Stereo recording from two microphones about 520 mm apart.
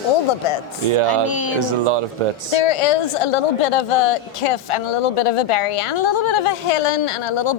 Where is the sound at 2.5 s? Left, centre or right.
Left.